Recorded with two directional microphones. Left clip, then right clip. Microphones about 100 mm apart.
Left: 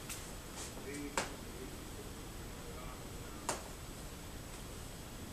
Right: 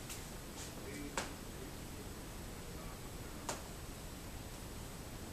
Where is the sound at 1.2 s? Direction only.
Centre (ahead or behind).